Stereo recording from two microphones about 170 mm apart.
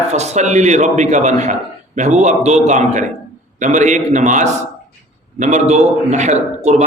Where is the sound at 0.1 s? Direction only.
40° right (ahead or behind).